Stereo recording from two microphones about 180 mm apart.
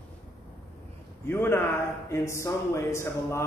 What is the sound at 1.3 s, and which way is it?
Speech, 15° left (ahead or behind).